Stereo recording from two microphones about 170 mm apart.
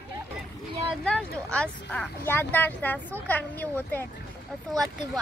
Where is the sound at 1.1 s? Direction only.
5° left (ahead or behind).